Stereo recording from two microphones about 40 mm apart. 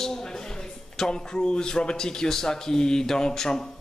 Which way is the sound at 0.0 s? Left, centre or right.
Centre.